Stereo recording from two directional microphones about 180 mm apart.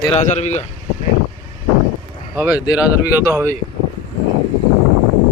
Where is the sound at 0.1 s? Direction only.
40° left (ahead or behind).